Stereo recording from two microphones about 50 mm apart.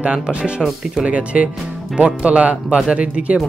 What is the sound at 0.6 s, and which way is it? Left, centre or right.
Speech, centre.